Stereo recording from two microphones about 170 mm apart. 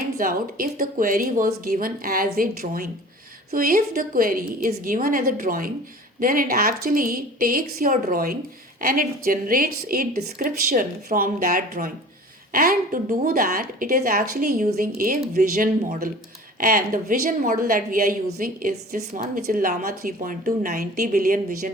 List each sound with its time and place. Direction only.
0.2 s a woman's voice: 55° right (ahead or behind)